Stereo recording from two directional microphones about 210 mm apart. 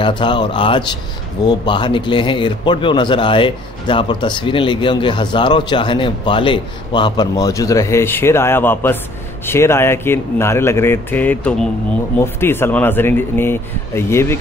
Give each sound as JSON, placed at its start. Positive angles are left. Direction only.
{"t": 0.0, "sound": "a man's voice", "side_deg": 20}